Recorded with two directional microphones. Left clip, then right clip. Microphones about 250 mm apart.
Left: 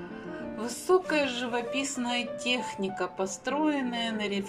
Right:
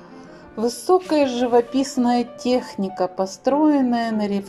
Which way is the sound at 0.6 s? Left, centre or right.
Centre.